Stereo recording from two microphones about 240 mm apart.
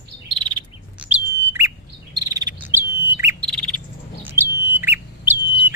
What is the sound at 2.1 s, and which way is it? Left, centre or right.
Cricket, centre.